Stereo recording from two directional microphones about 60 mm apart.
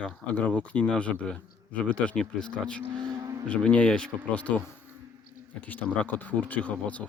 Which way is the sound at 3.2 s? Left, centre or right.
Right.